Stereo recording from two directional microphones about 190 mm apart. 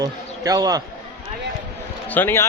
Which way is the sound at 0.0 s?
20° right (ahead or behind).